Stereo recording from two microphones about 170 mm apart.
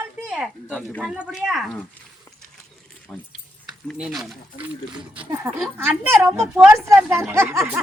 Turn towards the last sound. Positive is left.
turn(degrees=-15)  # may be behind; listen again after turning